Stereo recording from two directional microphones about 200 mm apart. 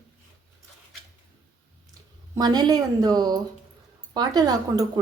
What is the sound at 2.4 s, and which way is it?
A woman's voice, 20° right (ahead or behind).